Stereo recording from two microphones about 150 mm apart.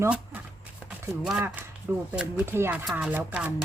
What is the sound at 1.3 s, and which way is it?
A woman's voice, 10° right (ahead or behind).